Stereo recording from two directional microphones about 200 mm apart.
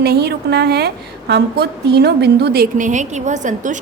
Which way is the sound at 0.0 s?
55° right (ahead or behind).